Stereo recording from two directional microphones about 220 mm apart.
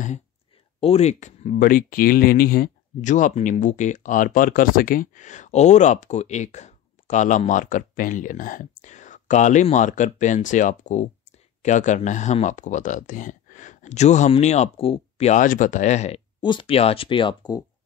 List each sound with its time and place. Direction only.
0.7 s speech: 25° left (ahead or behind)
16.3 s speech: 20° left (ahead or behind)